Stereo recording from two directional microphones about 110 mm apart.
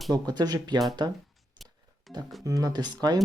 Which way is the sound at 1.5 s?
Centre (ahead or behind).